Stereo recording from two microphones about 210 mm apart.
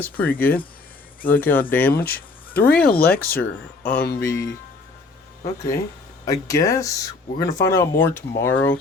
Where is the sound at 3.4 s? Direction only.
5° left (ahead or behind).